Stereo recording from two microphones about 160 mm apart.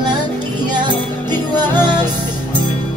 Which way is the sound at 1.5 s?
25° right (ahead or behind).